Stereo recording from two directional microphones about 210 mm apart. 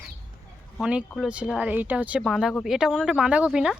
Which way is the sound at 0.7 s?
5° right (ahead or behind).